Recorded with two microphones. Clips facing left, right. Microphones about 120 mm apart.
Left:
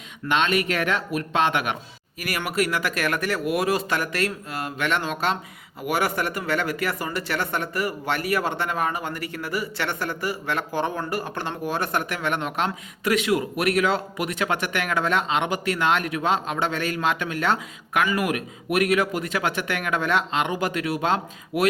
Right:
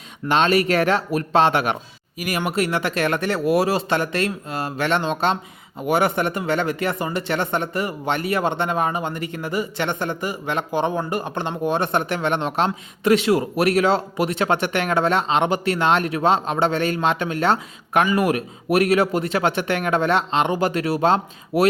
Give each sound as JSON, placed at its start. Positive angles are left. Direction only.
{"t": 0.3, "sound": "speech", "side_deg": -35}
{"t": 2.1, "sound": "speech", "side_deg": -20}